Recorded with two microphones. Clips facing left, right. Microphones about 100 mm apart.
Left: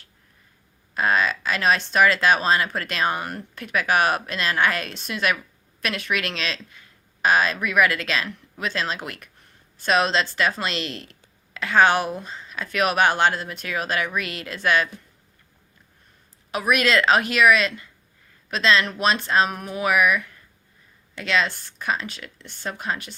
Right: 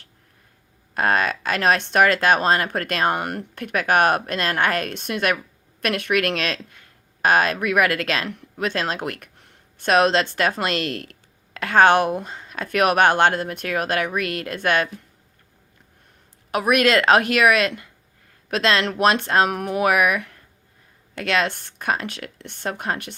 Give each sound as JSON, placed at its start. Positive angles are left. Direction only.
{"t": 0.9, "sound": "speech", "side_deg": -55}
{"t": 16.5, "sound": "speech", "side_deg": -50}